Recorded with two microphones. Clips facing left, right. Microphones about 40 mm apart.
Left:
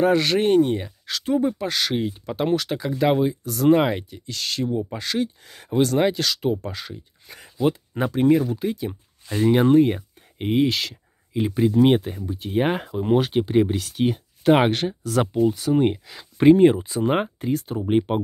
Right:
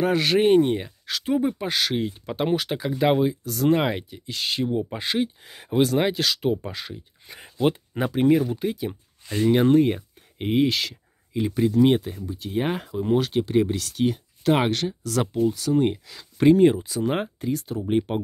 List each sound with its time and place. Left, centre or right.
0.0 s speech: centre
1.9 s speech: centre
4.3 s speech: centre
11.3 s speech: centre
11.7 s speech: left